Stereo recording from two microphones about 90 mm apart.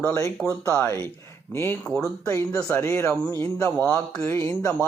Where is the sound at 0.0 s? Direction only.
35° left (ahead or behind).